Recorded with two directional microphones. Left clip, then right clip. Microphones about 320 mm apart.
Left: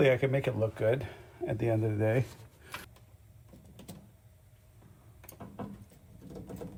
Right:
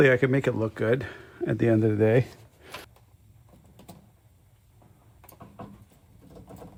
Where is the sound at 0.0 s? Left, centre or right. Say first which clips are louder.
Right 6 dB; right.